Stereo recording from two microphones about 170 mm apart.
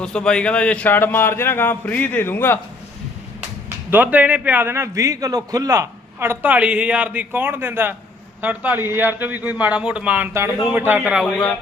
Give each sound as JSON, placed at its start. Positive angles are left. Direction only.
{"t": 0.0, "sound": "a man's voice", "side_deg": 5}
{"t": 3.8, "sound": "a man's voice", "side_deg": -10}